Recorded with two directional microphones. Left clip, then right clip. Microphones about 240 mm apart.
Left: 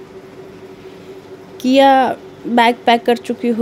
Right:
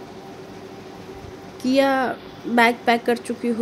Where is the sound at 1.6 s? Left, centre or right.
Left.